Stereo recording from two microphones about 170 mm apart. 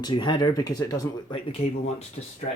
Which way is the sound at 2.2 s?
45° left (ahead or behind).